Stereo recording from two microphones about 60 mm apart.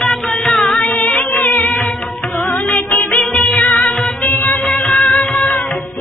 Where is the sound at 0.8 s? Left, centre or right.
Centre.